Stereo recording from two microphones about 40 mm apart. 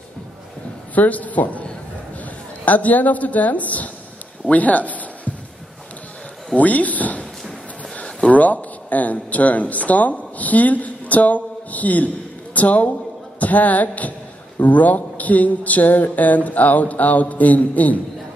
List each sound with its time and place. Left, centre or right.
0.9 s a woman's voice: left
4.5 s a sound: left
6.5 s speech: left